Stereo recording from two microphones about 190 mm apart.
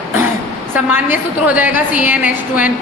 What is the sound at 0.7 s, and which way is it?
A woman's voice, 10° right (ahead or behind).